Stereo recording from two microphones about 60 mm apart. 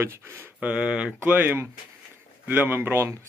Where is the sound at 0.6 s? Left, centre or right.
Centre.